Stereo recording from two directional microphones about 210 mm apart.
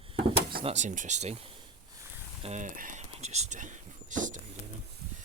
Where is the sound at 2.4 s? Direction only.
35° right (ahead or behind).